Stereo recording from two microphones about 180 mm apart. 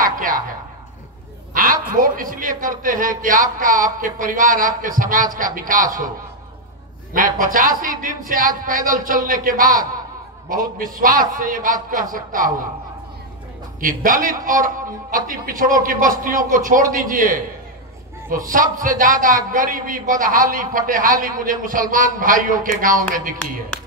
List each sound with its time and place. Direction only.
0.0 s a sound: 50° right (ahead or behind)
1.5 s a man's voice: 50° right (ahead or behind)
7.2 s a man's voice: 50° right (ahead or behind)
13.7 s a man's voice: 50° right (ahead or behind)
18.5 s a man's voice: 50° right (ahead or behind)